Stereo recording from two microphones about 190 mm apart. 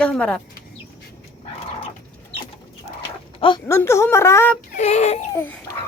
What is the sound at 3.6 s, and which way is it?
Speech, 15° left (ahead or behind).